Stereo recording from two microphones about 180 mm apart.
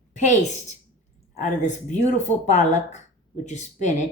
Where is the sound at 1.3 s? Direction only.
40° left (ahead or behind).